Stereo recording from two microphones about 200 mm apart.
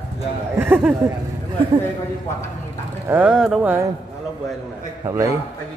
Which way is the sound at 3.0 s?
10° right (ahead or behind).